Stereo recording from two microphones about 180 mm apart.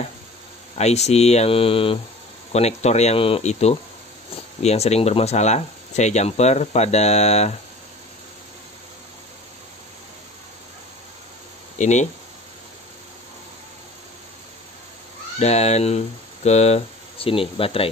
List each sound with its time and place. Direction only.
0.7 s speech: 35° left (ahead or behind)
11.8 s speech: 40° left (ahead or behind)
15.3 s speech: 35° left (ahead or behind)